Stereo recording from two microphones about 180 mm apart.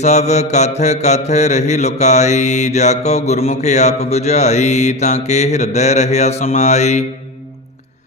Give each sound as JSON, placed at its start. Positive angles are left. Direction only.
{"t": 0.0, "sound": "mantra", "side_deg": 40}